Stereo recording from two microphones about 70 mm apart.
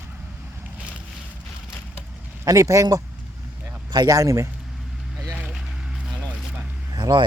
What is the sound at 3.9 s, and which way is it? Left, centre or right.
Speech, right.